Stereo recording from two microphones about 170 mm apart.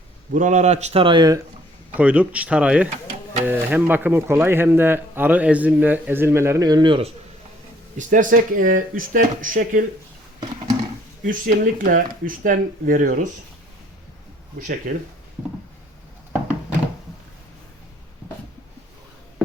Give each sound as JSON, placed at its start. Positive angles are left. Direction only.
{"t": 0.3, "sound": "speech", "side_deg": -45}
{"t": 2.0, "sound": "speech", "side_deg": -10}
{"t": 7.9, "sound": "speech", "side_deg": -50}
{"t": 11.3, "sound": "speech", "side_deg": -55}
{"t": 14.9, "sound": "speech", "side_deg": -55}